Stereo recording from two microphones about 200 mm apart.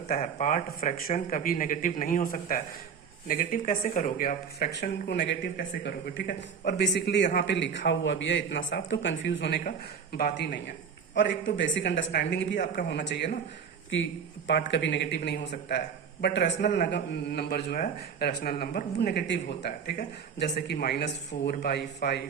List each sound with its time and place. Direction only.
0.2 s speech: 40° left (ahead or behind)
4.7 s a man's voice: 55° left (ahead or behind)